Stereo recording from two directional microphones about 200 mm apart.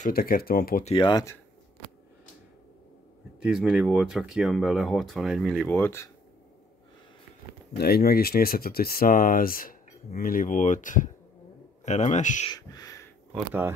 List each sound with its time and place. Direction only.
0.0 s speech: 45° left (ahead or behind)
0.8 s speech: 25° left (ahead or behind)
3.4 s speech: centre (ahead or behind)
7.7 s speech: 50° left (ahead or behind)
12.4 s a sound: 20° left (ahead or behind)
13.3 s speech: 10° right (ahead or behind)